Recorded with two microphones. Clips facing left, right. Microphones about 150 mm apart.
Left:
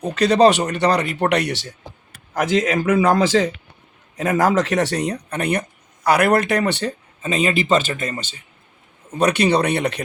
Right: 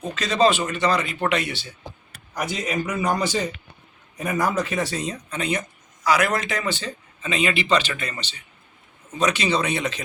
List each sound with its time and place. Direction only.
0.1 s speech: 65° left (ahead or behind)
2.3 s a man's voice: 90° left; by 6.9 s 65° left (ahead or behind)
7.2 s a man's voice: 45° left (ahead or behind)
9.1 s speech: 60° left (ahead or behind)